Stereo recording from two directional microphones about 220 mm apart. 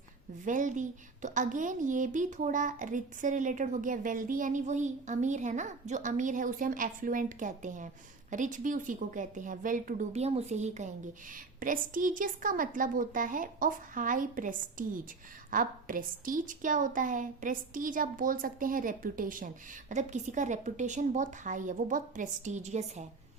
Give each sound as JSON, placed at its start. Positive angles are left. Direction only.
{"t": 0.4, "sound": "a woman's voice", "side_deg": -35}